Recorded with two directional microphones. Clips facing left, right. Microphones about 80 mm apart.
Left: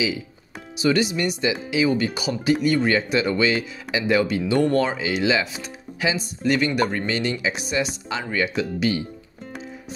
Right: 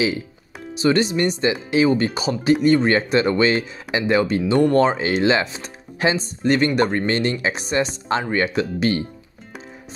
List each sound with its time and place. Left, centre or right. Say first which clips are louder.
0.8 s speech: right 3 dB; right
7.1 s speech: right 3 dB; right